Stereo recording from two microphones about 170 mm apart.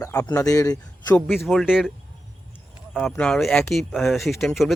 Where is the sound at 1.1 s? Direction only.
5° left (ahead or behind).